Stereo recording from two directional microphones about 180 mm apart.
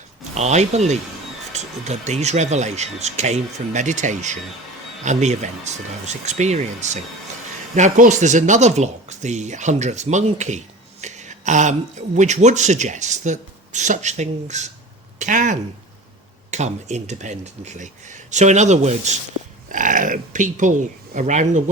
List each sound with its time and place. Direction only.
0.3 s speech: 40° right (ahead or behind)